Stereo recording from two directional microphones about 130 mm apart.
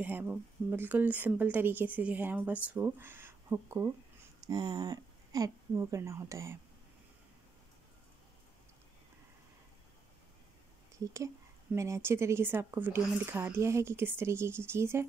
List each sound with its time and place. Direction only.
0.0 s a woman's voice: 15° right (ahead or behind)
4.4 s speech: 30° right (ahead or behind)
11.7 s a woman's voice: 20° right (ahead or behind)